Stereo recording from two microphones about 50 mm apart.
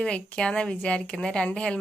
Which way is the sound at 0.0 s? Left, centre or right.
Centre.